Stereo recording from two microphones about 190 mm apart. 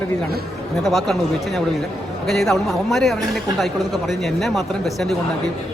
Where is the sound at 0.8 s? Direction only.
Centre (ahead or behind).